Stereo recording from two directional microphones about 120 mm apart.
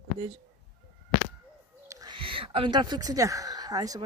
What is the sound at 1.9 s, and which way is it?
Owl, 30° right (ahead or behind).